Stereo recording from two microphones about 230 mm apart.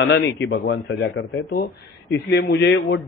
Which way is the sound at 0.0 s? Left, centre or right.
Left.